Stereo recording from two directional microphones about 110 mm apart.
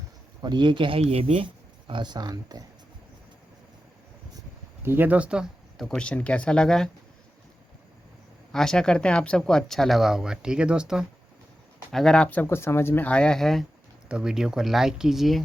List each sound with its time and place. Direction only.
0.4 s speech: 40° right (ahead or behind); by 1.5 s 55° right (ahead or behind)
1.9 s speech: 45° right (ahead or behind)
4.8 s speech: 20° right (ahead or behind)
5.7 s speech: 5° left (ahead or behind)
8.5 s speech: 5° left (ahead or behind)
11.9 s speech: 5° left (ahead or behind)